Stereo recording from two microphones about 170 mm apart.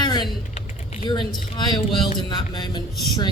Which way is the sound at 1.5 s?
25° left (ahead or behind).